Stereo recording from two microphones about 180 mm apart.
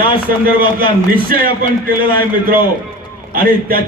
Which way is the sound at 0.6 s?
55° right (ahead or behind).